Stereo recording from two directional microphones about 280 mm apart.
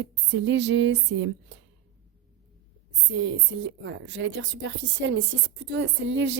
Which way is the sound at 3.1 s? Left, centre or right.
Right.